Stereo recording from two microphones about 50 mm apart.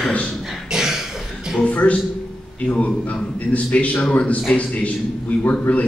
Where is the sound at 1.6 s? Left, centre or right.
Left.